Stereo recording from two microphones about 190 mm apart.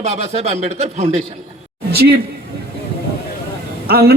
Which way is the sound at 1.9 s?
55° right (ahead or behind).